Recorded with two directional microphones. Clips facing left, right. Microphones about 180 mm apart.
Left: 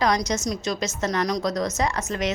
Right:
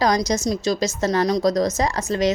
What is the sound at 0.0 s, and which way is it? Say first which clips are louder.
A woman's voice: right 3 dB; 35° right (ahead or behind).